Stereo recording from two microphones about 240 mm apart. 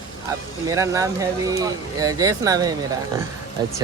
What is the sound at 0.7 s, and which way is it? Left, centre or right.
Speech, centre.